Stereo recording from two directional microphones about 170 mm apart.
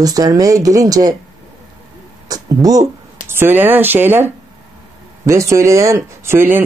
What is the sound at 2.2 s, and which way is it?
Speech, 20° right (ahead or behind).